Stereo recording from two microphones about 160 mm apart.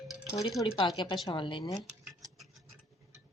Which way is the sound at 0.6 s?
30° left (ahead or behind).